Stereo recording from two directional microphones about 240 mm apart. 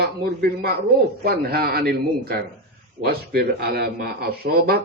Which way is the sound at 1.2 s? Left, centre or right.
Right.